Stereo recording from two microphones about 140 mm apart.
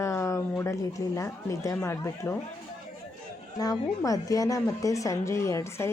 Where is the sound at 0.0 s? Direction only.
20° left (ahead or behind).